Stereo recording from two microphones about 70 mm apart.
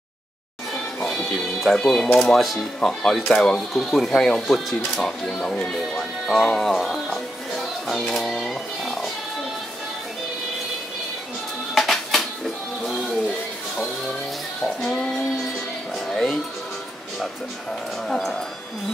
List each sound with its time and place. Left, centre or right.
1.6 s speech: centre
8.1 s cat: centre
11.7 s music: centre
14.8 s child singing: centre
16.1 s music: centre
18.0 s speech: centre